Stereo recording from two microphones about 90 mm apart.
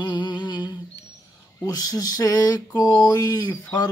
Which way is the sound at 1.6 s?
45° left (ahead or behind).